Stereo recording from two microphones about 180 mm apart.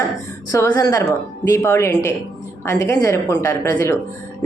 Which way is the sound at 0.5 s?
15° left (ahead or behind).